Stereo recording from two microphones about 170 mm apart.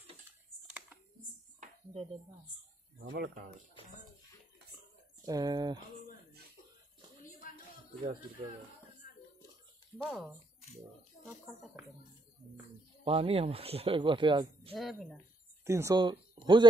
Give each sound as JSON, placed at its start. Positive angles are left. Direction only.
{"t": 0.7, "sound": "a sound", "side_deg": -10}
{"t": 3.0, "sound": "speech", "side_deg": -85}
{"t": 5.2, "sound": "speech", "side_deg": -20}
{"t": 10.0, "sound": "speech", "side_deg": 0}
{"t": 13.0, "sound": "speech", "side_deg": -35}
{"t": 14.7, "sound": "speech", "side_deg": 0}
{"t": 15.6, "sound": "speech", "side_deg": -15}